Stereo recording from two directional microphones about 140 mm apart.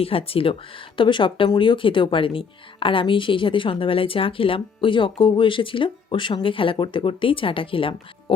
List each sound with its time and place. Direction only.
0.0 s speech: 45° left (ahead or behind)